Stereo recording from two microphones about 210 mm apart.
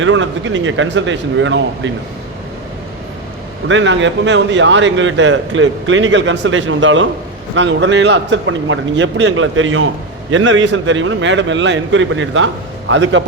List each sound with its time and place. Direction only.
0.0 s a man's voice: 65° right (ahead or behind)
3.7 s a man's voice: 60° right (ahead or behind)